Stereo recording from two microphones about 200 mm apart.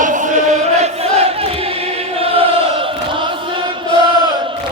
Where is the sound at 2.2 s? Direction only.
30° right (ahead or behind).